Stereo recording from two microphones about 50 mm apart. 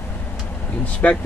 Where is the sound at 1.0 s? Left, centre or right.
Left.